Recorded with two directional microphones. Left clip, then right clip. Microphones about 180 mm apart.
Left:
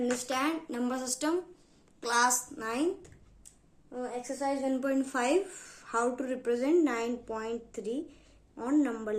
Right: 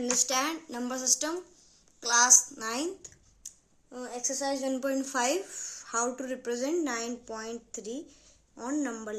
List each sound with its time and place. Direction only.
0.0 s a woman's voice: 30° right (ahead or behind)
2.6 s speech: 35° right (ahead or behind)